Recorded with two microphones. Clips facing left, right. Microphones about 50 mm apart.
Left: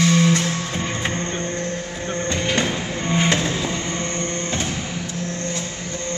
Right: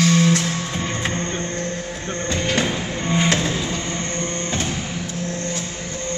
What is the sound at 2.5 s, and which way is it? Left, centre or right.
Music, centre.